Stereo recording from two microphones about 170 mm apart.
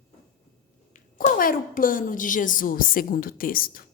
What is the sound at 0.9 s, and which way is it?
A woman's voice, 50° left (ahead or behind).